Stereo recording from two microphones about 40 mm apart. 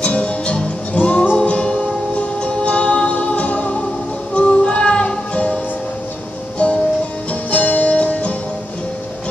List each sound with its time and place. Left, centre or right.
0.0 s music: left
6.6 s music: left